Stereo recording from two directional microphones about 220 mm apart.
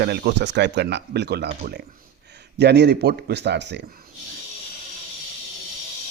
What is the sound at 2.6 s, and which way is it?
Speech, 50° right (ahead or behind).